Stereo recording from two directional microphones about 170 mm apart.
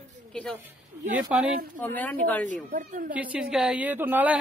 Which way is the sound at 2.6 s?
50° right (ahead or behind).